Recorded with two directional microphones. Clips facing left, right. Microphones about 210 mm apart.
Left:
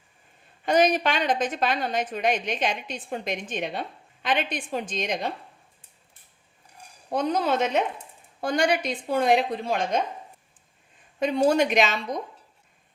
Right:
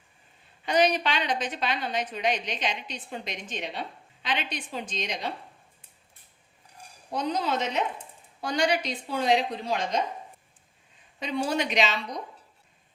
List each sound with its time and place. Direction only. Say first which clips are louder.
0.6 s a woman's voice: left 3 dB; 45° left (ahead or behind)
7.1 s a woman's voice: left 4 dB; 50° left (ahead or behind)
11.2 s a woman's voice: left 7 dB; 50° left (ahead or behind)